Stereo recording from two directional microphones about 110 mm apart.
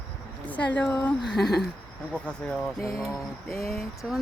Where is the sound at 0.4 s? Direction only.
15° left (ahead or behind).